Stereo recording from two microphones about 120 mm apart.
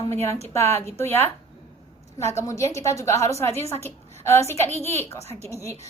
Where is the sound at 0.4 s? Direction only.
20° left (ahead or behind).